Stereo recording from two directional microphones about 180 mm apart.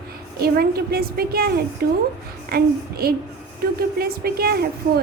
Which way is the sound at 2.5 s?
55° right (ahead or behind).